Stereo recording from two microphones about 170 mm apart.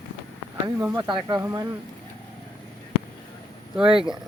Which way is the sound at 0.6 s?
20° right (ahead or behind).